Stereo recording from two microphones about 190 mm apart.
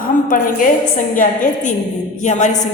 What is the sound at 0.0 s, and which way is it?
A woman's voice, 45° left (ahead or behind).